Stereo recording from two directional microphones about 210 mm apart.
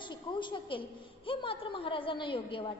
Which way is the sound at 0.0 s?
20° left (ahead or behind).